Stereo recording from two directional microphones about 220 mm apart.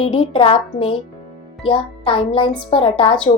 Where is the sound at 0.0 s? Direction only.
25° left (ahead or behind).